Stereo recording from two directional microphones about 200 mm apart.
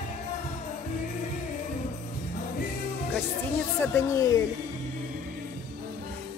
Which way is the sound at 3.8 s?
15° left (ahead or behind).